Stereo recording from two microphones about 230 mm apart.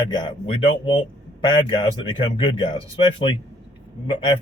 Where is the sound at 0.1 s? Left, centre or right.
Centre.